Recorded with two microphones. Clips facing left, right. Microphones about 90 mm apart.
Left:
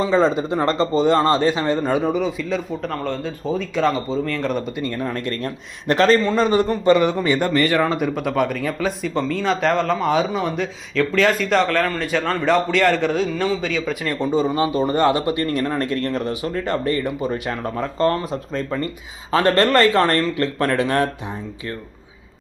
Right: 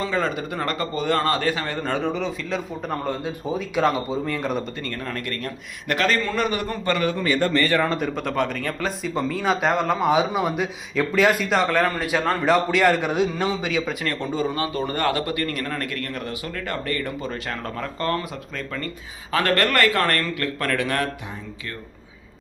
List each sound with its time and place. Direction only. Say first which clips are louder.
0.0 s a man's voice: left 7 dB; 25° left (ahead or behind)
1.8 s a man's voice: left 5 dB; 10° left (ahead or behind)
2.9 s a man's voice: right 2 dB; 10° right (ahead or behind)
4.8 s a man's voice: left 6 dB; 20° left (ahead or behind); by 13.9 s 5° right (ahead or behind)
14.0 s a man's voice: left 5 dB; 15° left (ahead or behind)